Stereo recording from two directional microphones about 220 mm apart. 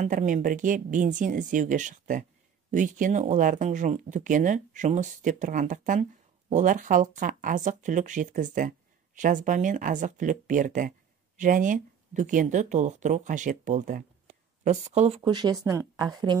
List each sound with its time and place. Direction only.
0.0 s speech: 35° right (ahead or behind); by 16.3 s 20° right (ahead or behind)